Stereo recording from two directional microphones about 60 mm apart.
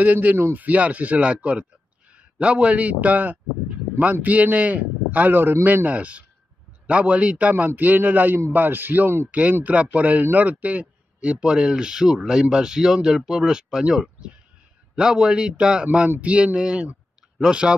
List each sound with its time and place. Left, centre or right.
0.0 s a man's voice: right
0.7 s a man's voice: right
5.9 s a man's voice: right